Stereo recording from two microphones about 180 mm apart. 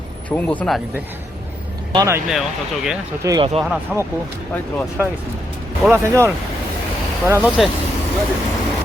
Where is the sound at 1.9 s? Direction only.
20° right (ahead or behind).